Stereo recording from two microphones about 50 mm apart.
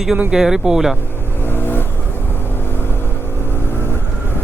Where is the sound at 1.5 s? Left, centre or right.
Left.